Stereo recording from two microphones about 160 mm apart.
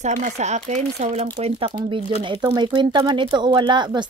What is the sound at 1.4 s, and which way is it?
A woman's voice, 35° right (ahead or behind).